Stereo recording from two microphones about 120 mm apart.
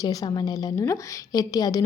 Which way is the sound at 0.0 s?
30° left (ahead or behind).